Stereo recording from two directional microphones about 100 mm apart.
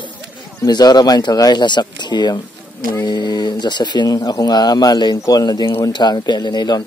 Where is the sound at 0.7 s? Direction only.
45° left (ahead or behind).